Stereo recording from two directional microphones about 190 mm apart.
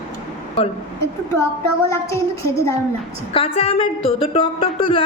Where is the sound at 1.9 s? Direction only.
15° left (ahead or behind).